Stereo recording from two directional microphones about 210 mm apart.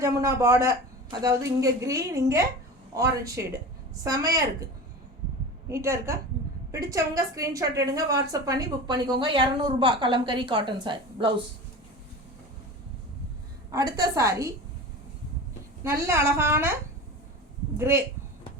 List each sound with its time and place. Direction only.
0.0 s a woman's voice: 15° right (ahead or behind)
13.7 s a woman's voice: 20° right (ahead or behind)
15.8 s a woman's voice: 10° right (ahead or behind)
17.7 s a woman's voice: 10° right (ahead or behind)